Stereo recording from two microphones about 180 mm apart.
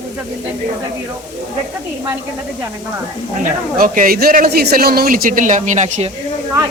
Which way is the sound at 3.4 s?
50° right (ahead or behind).